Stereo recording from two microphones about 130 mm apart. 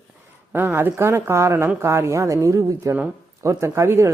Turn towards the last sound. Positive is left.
turn(degrees=-20)  # may be behind; listen again after turning